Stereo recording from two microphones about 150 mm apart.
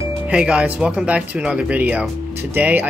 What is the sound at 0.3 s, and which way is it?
Speech, 5° right (ahead or behind).